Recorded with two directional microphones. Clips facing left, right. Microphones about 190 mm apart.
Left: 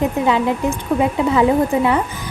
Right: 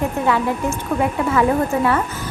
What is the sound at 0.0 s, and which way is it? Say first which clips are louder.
A woman's voice: left 2 dB; 20° left (ahead or behind).